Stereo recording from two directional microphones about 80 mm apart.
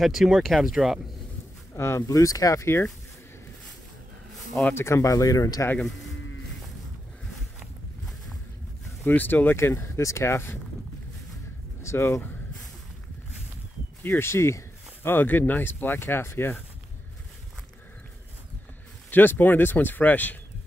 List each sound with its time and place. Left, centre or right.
0.0 s speech: centre
1.8 s speech: left
4.7 s speech: left
5.8 s speech: centre
9.0 s speech: left
11.8 s speech: left
14.0 s speech: left
15.0 s speech: left
19.0 s speech: left